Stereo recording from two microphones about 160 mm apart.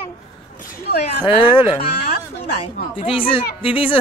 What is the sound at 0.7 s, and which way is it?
Speech, 90° left.